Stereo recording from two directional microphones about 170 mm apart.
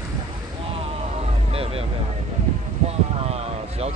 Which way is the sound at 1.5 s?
35° right (ahead or behind).